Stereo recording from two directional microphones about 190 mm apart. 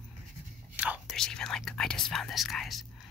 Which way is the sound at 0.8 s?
5° right (ahead or behind).